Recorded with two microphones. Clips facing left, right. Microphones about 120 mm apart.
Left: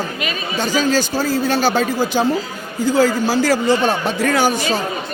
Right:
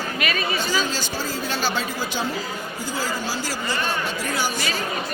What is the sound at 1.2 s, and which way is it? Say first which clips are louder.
Speech: left 9 dB; 50° left (ahead or behind).